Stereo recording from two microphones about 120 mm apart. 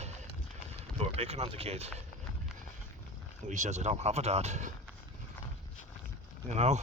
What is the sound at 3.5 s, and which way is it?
Speech, 80° right.